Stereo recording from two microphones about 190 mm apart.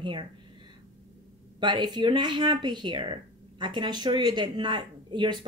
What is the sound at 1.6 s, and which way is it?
Speech, 25° right (ahead or behind).